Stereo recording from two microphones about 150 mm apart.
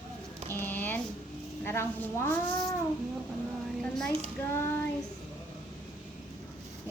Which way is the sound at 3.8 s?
5° left (ahead or behind).